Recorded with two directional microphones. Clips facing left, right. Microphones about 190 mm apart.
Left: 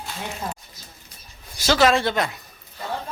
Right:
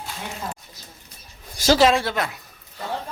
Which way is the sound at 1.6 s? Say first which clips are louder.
Right 2 dB; 40° right (ahead or behind).